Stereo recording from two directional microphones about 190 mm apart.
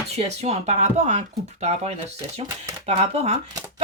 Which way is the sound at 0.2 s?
35° right (ahead or behind).